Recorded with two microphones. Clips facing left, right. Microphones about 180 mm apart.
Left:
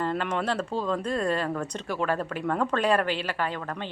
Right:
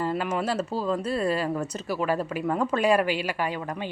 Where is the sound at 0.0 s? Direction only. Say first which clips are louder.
Right 1 dB; 5° right (ahead or behind).